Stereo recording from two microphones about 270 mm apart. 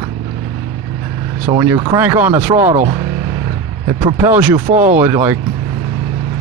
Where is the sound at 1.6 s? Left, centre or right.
Centre.